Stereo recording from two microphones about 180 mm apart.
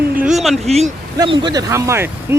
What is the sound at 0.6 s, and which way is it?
Speech, 35° right (ahead or behind).